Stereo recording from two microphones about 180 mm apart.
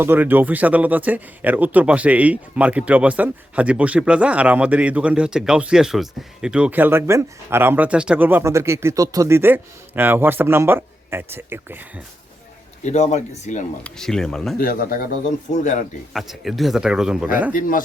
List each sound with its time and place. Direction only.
0.0 s speech: 10° right (ahead or behind)
12.8 s speech: 40° left (ahead or behind)
13.8 s speech: 5° left (ahead or behind)
14.6 s speech: 55° left (ahead or behind)
15.5 s speech: 40° left (ahead or behind)
16.1 s speech: centre (ahead or behind)
17.5 s speech: 50° left (ahead or behind)